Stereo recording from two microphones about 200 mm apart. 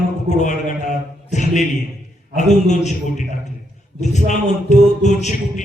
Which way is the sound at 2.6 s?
35° left (ahead or behind).